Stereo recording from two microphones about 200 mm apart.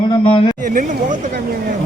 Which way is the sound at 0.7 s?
40° right (ahead or behind).